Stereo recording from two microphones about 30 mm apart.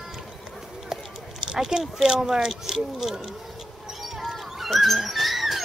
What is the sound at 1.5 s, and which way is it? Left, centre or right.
Speech, centre.